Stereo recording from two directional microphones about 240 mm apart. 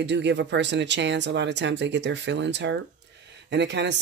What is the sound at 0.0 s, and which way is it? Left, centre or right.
Speech, right.